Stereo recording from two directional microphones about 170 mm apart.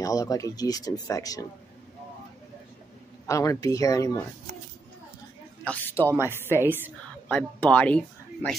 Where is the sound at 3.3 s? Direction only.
20° left (ahead or behind).